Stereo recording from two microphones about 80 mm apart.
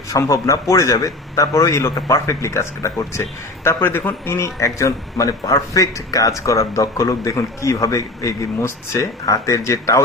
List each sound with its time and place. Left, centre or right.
0.1 s a man's voice: left